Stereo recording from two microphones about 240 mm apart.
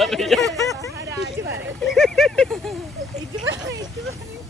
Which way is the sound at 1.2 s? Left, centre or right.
Right.